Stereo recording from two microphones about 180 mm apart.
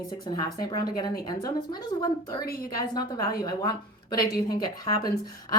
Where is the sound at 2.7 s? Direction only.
20° left (ahead or behind).